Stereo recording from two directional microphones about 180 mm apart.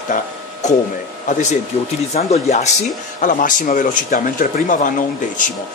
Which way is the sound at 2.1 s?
40° left (ahead or behind).